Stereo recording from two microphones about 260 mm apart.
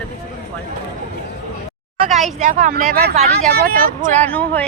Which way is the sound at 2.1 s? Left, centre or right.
Centre.